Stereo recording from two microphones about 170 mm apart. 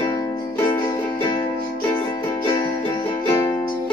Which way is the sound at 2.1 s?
20° left (ahead or behind).